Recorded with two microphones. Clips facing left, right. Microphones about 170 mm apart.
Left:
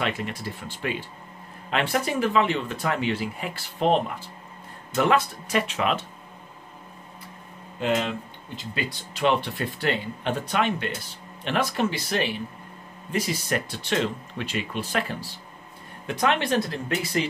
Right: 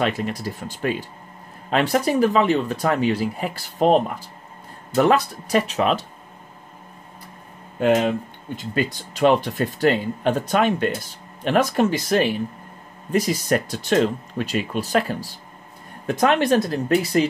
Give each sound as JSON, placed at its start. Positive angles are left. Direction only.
{"t": 0.0, "sound": "speech", "side_deg": -40}
{"t": 7.8, "sound": "speech", "side_deg": -50}